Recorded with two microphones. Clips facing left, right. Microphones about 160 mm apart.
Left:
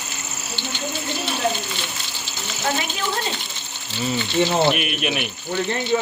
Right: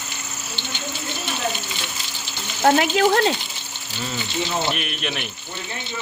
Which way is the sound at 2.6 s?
70° right (ahead or behind).